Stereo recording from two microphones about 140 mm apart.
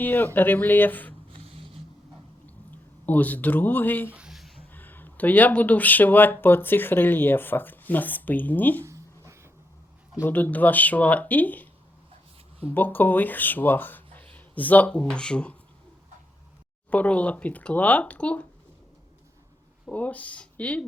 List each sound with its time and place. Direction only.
0.0 s speech: 15° left (ahead or behind)
1.4 s vehicle: 45° right (ahead or behind)
3.1 s speech: 10° left (ahead or behind)
4.1 s a sound: 5° right (ahead or behind)
4.7 s speech: 15° left (ahead or behind)
8.8 s a sound: 20° right (ahead or behind)
10.2 s speech: 15° left (ahead or behind)
16.9 s speech: 10° left (ahead or behind)
19.9 s speech: 10° left (ahead or behind)